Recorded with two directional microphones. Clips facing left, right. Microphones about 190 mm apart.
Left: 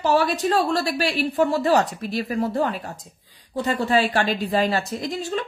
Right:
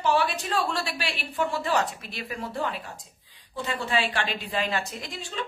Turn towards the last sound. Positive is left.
turn(degrees=40)  # may be behind; listen again after turning